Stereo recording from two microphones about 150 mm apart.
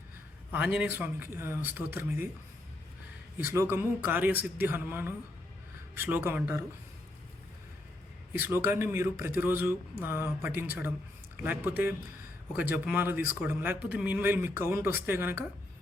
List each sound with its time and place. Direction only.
0.5 s a man's voice: 10° right (ahead or behind)
3.3 s a man's voice: 15° right (ahead or behind)
8.3 s a man's voice: 10° right (ahead or behind)